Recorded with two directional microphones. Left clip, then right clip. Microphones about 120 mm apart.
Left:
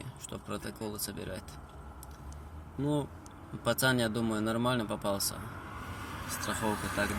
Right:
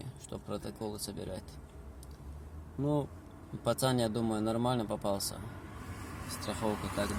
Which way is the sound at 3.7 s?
25° left (ahead or behind).